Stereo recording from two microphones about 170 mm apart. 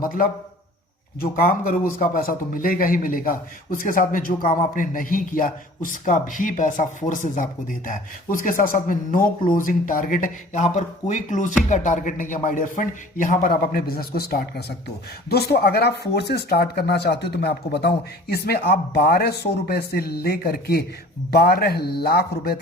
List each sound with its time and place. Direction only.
0.0 s a man's voice: 60° left (ahead or behind)